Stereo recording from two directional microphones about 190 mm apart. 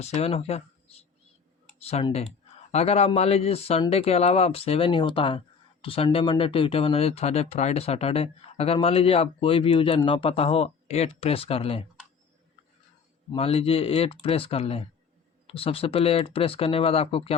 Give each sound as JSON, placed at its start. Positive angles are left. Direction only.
{"t": 0.0, "sound": "speech", "side_deg": 35}
{"t": 13.3, "sound": "speech", "side_deg": 30}